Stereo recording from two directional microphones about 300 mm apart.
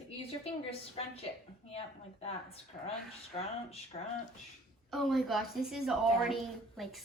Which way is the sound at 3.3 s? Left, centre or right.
Centre.